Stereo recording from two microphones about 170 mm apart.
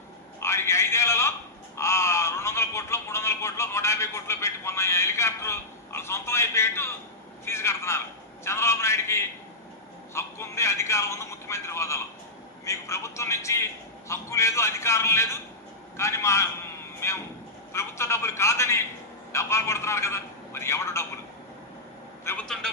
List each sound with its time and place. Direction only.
0.3 s a sound: 15° left (ahead or behind)
7.4 s speech: 15° left (ahead or behind)
22.2 s a woman's voice: 15° left (ahead or behind)